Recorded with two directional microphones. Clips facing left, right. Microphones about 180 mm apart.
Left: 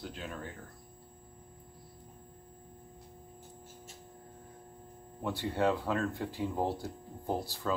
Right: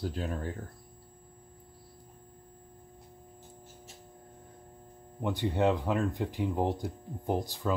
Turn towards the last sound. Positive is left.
turn(degrees=-15)  # may be behind; listen again after turning